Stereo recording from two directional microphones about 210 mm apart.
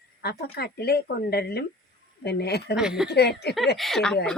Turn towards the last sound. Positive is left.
turn(degrees=0)  # may be behind; listen again after turning